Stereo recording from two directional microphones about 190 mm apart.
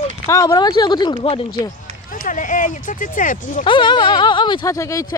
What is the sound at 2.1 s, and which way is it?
Speech, 45° left (ahead or behind).